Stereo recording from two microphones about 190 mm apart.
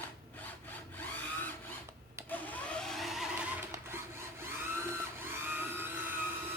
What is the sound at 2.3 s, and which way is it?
Vehicle, 5° left (ahead or behind).